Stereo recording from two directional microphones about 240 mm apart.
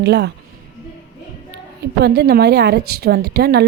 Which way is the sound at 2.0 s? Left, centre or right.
Right.